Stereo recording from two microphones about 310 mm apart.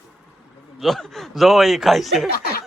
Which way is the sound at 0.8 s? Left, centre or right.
Centre.